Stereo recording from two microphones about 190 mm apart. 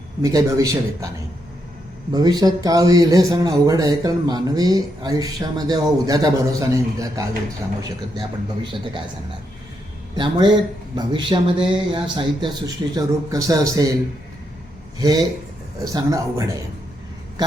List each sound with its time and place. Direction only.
0.2 s a man's voice: 20° right (ahead or behind)
2.1 s speech: 20° right (ahead or behind)
10.2 s speech: 25° right (ahead or behind)
15.8 s a man's voice: 20° right (ahead or behind)